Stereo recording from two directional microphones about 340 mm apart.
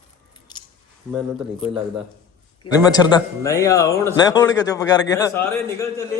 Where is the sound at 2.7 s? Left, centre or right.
Centre.